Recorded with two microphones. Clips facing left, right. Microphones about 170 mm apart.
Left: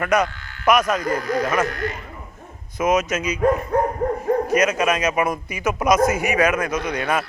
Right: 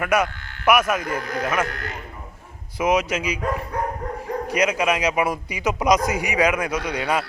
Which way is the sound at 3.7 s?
50° left (ahead or behind).